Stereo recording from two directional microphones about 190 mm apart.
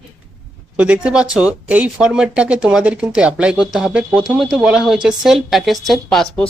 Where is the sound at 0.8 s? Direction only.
5° right (ahead or behind).